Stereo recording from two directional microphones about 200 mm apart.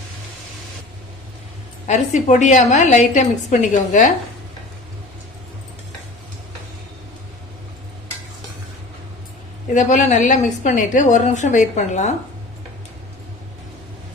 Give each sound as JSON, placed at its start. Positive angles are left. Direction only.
{"t": 1.9, "sound": "a woman's voice", "side_deg": 35}
{"t": 9.7, "sound": "a woman's voice", "side_deg": 35}